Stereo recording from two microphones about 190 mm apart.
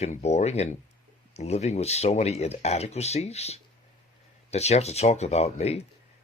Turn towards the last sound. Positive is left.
turn(degrees=35)  # may be behind; listen again after turning